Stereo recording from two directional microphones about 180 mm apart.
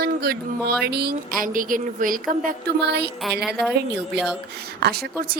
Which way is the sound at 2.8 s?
65° right (ahead or behind).